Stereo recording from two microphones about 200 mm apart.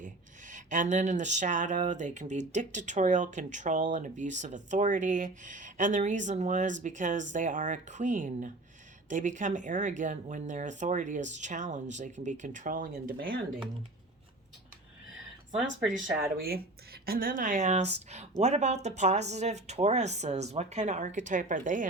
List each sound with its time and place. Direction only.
0.0 s speech: 40° right (ahead or behind)
15.5 s speech: 5° right (ahead or behind)
16.4 s speech: 50° right (ahead or behind)